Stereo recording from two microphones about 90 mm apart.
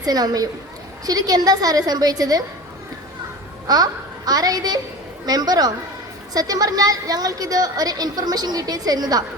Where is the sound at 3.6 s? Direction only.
45° right (ahead or behind).